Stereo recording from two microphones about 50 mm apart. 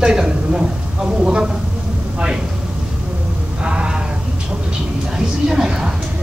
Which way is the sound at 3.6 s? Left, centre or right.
Centre.